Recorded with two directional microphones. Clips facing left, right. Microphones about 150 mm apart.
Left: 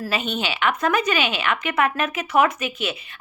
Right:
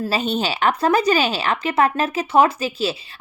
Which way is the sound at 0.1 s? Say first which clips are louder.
Right 2 dB; 35° right (ahead or behind).